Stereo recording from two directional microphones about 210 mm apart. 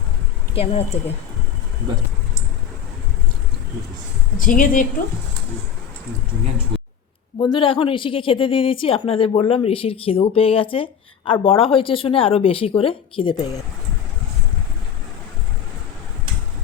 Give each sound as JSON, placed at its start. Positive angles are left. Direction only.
{"t": 0.5, "sound": "a woman's voice", "side_deg": 30}
{"t": 4.4, "sound": "a woman's voice", "side_deg": 40}
{"t": 6.7, "sound": "a sound", "side_deg": -25}
{"t": 7.3, "sound": "a woman's voice", "side_deg": 20}